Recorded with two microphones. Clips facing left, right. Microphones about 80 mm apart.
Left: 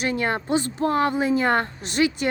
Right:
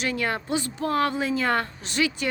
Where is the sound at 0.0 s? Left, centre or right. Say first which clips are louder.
Left 3 dB; left.